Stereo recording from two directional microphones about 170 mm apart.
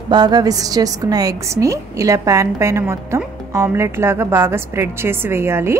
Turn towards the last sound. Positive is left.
turn(degrees=-15)  # may be behind; listen again after turning